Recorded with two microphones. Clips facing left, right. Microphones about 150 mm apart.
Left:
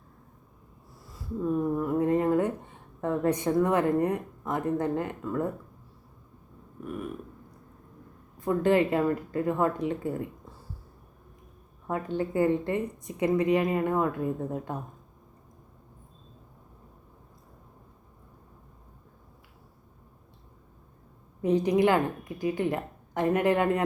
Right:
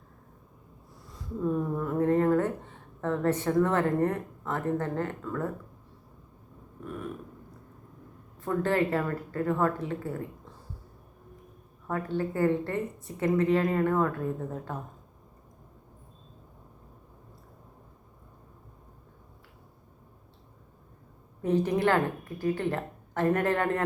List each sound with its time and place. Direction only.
1.1 s a sound: 10° left (ahead or behind)
8.4 s a woman's voice: 15° left (ahead or behind)
11.9 s a woman's voice: 15° left (ahead or behind)
21.4 s a woman's voice: 15° left (ahead or behind)